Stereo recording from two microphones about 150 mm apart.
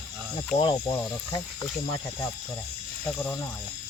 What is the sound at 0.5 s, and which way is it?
Speech, 30° left (ahead or behind).